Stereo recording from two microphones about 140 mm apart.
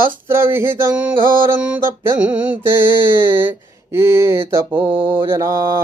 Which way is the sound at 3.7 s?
20° right (ahead or behind).